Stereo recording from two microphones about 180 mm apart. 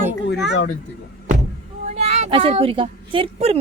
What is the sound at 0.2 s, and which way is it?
Speech, 80° left.